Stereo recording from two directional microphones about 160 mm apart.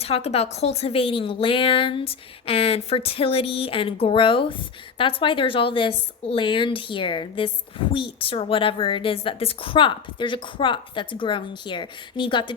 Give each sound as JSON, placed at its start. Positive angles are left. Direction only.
{"t": 0.0, "sound": "a woman's voice", "side_deg": 40}